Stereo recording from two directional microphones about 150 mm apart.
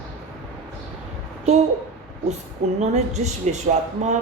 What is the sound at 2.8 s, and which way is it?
A woman's voice, 50° right (ahead or behind).